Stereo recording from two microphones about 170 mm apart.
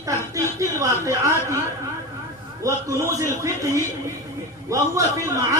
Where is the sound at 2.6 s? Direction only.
20° right (ahead or behind).